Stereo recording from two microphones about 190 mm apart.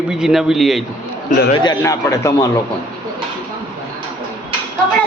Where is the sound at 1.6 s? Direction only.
15° left (ahead or behind).